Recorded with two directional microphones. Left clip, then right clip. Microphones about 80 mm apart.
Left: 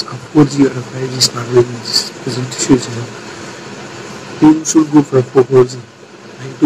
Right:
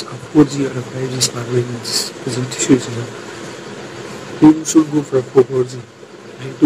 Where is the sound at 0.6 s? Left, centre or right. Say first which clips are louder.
Left 6 dB; left.